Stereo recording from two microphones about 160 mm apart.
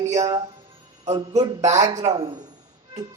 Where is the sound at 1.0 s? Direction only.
25° right (ahead or behind).